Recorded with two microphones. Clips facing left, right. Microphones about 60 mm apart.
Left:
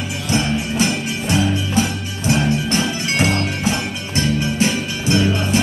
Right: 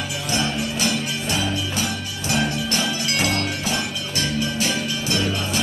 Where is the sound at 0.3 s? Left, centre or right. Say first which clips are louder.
Left 5 dB; left.